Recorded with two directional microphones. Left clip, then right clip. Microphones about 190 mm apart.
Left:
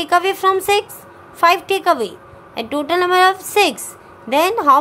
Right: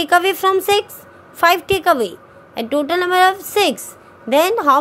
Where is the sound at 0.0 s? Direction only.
20° right (ahead or behind).